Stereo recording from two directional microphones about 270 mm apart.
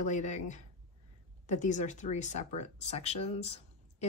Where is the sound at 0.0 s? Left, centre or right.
Left.